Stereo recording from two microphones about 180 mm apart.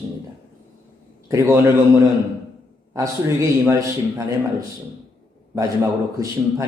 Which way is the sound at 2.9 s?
15° right (ahead or behind).